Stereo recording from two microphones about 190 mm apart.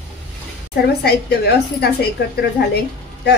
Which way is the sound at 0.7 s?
60° left (ahead or behind).